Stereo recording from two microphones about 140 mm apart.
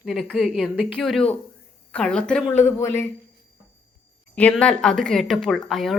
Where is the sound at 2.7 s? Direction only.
15° left (ahead or behind).